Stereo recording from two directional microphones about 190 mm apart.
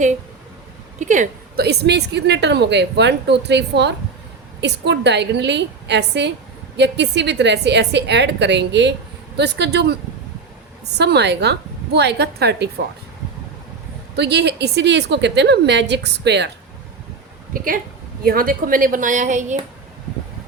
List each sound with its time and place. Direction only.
0.9 s a woman's voice: 40° right (ahead or behind)
1.5 s a woman's voice: 60° right (ahead or behind)
14.2 s a woman's voice: 60° right (ahead or behind)
18.2 s speech: 50° right (ahead or behind)